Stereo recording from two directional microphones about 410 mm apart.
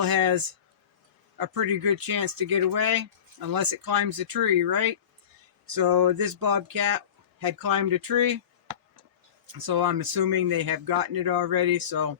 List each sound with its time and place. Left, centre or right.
0.0 s speech: right